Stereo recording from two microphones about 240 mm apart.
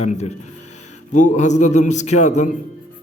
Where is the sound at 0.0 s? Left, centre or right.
Left.